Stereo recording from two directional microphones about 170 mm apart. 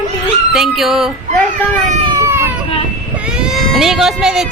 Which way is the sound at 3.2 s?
5° right (ahead or behind).